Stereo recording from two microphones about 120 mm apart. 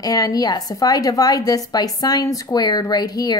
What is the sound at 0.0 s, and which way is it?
A woman's voice, 30° left (ahead or behind).